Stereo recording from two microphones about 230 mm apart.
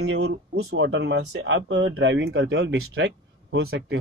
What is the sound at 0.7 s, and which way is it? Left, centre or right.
Speech, right.